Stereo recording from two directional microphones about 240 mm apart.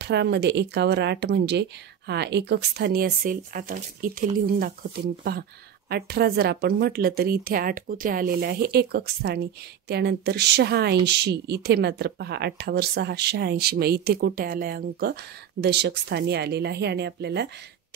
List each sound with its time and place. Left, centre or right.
0.0 s speech: right
5.9 s a woman's voice: right